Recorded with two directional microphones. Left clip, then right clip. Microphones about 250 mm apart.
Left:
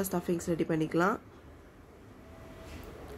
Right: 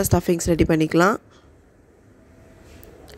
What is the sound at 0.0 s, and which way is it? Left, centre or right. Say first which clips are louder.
A woman's voice: right 12 dB; right.